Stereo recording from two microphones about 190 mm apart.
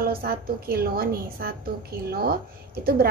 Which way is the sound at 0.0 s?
50° right (ahead or behind).